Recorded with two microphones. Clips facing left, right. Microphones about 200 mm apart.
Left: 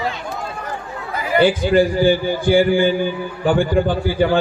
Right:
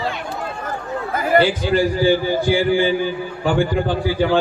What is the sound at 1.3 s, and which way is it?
Speech, 50° right (ahead or behind).